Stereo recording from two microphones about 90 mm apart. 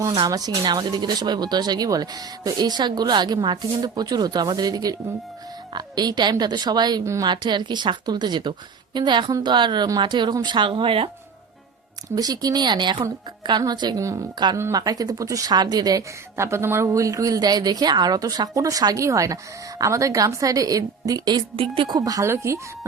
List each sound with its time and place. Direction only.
0.3 s speech: 45° right (ahead or behind)
7.0 s a woman's voice: 35° right (ahead or behind)
7.3 s a woman's voice: 55° right (ahead or behind); by 11.1 s 75° right (ahead or behind)
12.1 s a woman's voice: 45° right (ahead or behind)
14.0 s a woman's voice: 35° right (ahead or behind)
14.8 s speech: 45° right (ahead or behind)
16.4 s a woman's voice: 30° right (ahead or behind)
21.5 s a woman's voice: 85° right
21.9 s a woman's voice: 40° right (ahead or behind)